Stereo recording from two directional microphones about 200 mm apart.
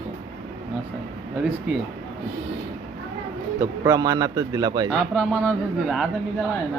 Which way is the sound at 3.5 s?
15° right (ahead or behind).